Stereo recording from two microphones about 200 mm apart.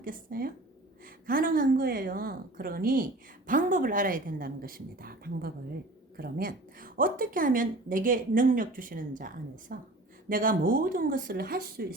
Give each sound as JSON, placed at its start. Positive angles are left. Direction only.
{"t": 0.0, "sound": "a woman's voice", "side_deg": -45}